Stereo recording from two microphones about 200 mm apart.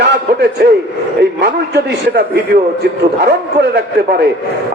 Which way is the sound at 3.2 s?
55° right (ahead or behind).